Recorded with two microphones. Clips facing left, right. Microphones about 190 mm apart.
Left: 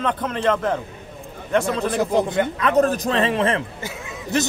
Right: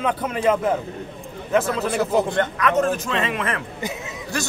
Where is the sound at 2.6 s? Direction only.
35° left (ahead or behind).